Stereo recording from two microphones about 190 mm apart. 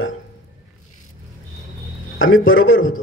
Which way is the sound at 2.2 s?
90° left.